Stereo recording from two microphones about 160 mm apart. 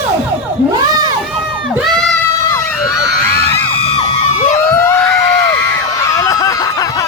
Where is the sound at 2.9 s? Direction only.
15° left (ahead or behind).